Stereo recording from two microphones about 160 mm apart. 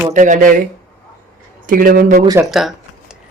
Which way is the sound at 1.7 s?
60° right (ahead or behind).